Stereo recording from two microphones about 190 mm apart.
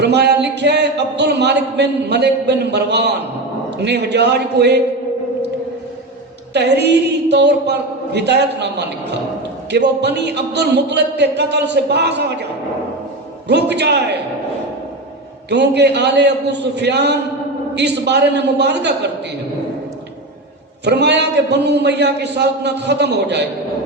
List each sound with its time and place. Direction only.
0.0 s speech: 60° right (ahead or behind)
6.5 s speech: 60° right (ahead or behind)
13.5 s speech: 65° right (ahead or behind)
15.4 s speech: 60° right (ahead or behind)
20.8 s speech: 60° right (ahead or behind)